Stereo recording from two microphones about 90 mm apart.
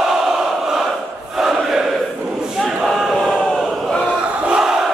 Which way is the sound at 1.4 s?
5° right (ahead or behind).